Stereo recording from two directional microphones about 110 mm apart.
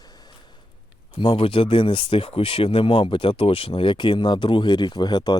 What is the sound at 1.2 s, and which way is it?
Speech, 50° left (ahead or behind).